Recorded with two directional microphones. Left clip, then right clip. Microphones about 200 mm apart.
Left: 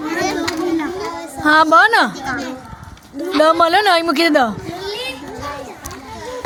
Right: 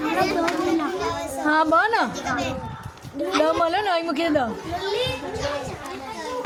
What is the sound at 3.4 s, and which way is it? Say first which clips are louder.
Speech: left 9 dB; 30° left (ahead or behind).